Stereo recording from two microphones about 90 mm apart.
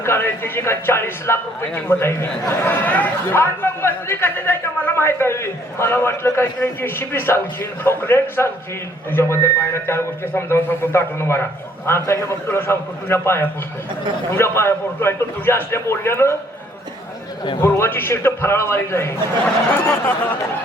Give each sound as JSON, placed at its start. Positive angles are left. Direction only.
{"t": 0.0, "sound": "speech", "side_deg": 25}
{"t": 17.6, "sound": "speech", "side_deg": 25}